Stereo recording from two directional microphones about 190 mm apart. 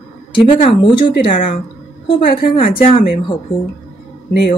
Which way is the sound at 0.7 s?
30° left (ahead or behind).